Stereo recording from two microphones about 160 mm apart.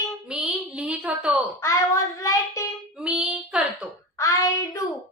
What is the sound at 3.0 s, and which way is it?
Child singing, 5° right (ahead or behind).